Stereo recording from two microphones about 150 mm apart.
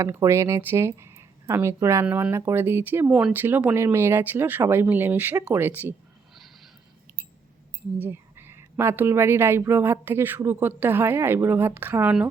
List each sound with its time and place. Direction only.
0.0 s a woman's voice: 20° right (ahead or behind)
3.1 s a woman's voice: 5° right (ahead or behind)
6.3 s a sound: centre (ahead or behind)
7.9 s a woman's voice: 15° right (ahead or behind)